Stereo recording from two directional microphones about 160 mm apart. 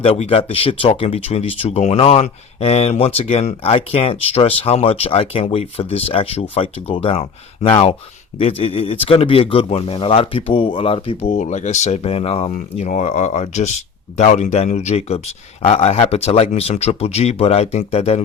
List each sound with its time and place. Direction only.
0.0 s speech: 35° left (ahead or behind)
11.3 s speech: 50° left (ahead or behind)